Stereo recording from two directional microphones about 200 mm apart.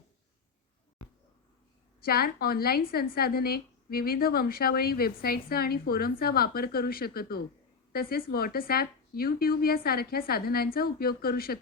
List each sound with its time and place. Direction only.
2.0 s a woman's voice: 50° left (ahead or behind)